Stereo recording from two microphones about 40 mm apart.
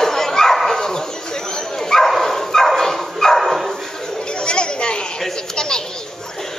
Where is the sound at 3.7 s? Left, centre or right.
Centre.